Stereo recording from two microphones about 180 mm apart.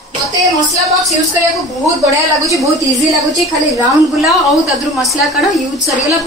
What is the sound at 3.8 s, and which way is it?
A woman's voice, centre (ahead or behind).